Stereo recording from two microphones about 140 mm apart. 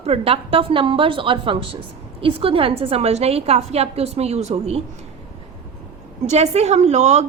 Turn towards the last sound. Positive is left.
turn(degrees=-55)  # may be behind; listen again after turning